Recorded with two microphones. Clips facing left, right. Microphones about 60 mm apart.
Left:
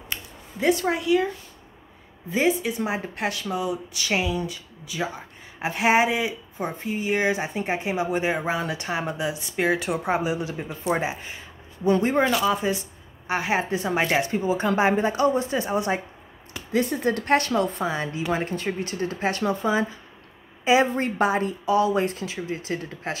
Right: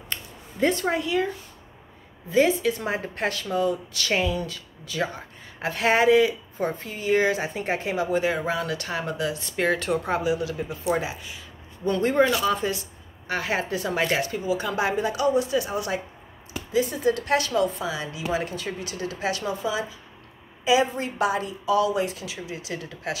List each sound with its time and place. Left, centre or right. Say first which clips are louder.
0.1 s a sound: even; centre
2.3 s a woman's voice: right 2 dB; centre; by 11.4 s left
11.9 s speech: even; centre
14.4 s a woman's voice: left 4 dB; left
16.7 s a woman's voice: even; left